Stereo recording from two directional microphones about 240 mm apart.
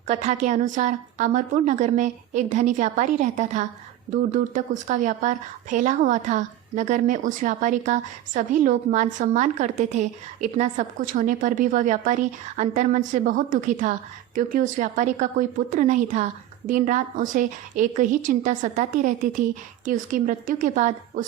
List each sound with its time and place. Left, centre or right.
0.1 s speech: right